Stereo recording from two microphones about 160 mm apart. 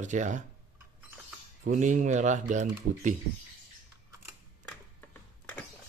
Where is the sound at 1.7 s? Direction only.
55° right (ahead or behind).